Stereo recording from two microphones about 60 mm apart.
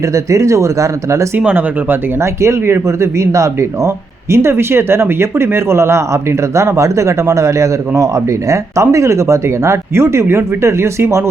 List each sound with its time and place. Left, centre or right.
0.1 s a man's voice: right
1.4 s speech: right
2.2 s a man's voice: right